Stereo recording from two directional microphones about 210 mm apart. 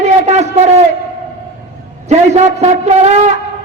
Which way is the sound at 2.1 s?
30° right (ahead or behind).